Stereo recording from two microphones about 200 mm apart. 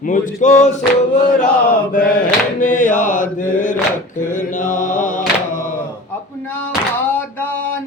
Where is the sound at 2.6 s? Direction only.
40° left (ahead or behind).